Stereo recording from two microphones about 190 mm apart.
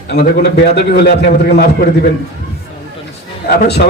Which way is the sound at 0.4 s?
60° left (ahead or behind).